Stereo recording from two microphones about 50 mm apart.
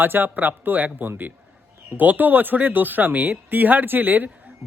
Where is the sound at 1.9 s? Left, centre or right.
Right.